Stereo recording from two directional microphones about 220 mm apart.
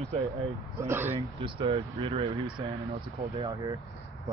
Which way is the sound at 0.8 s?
10° right (ahead or behind).